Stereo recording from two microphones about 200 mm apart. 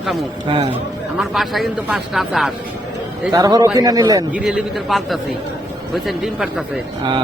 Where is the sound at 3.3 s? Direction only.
20° right (ahead or behind).